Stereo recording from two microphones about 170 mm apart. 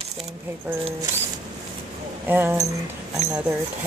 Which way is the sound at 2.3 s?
15° right (ahead or behind).